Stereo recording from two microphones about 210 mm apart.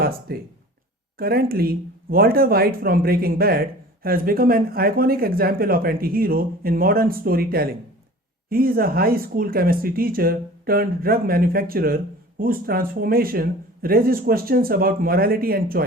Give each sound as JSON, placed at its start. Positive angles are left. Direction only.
{"t": 0.0, "sound": "speech", "side_deg": -45}